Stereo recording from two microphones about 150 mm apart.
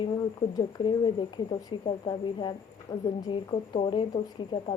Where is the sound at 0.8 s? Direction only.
30° left (ahead or behind).